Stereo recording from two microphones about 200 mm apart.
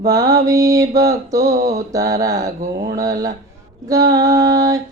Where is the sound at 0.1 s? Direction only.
20° right (ahead or behind).